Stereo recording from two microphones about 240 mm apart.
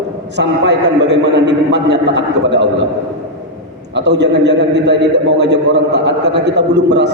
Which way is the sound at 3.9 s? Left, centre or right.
Right.